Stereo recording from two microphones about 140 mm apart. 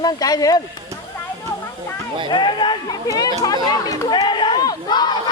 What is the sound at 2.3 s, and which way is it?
Speech, 35° left (ahead or behind).